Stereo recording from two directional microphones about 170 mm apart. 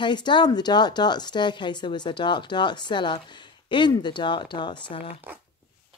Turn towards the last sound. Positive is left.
turn(degrees=25)  # may be behind; listen again after turning